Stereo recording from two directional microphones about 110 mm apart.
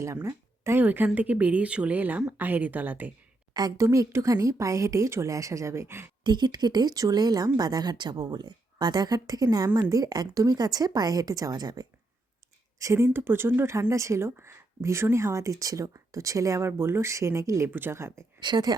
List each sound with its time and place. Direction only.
0.0 s speech: 25° right (ahead or behind)
3.5 s a woman's voice: 35° right (ahead or behind)
3.8 s speech: 25° right (ahead or behind)
6.2 s speech: 40° right (ahead or behind)
12.8 s speech: 25° right (ahead or behind)
18.3 s speech: 40° right (ahead or behind)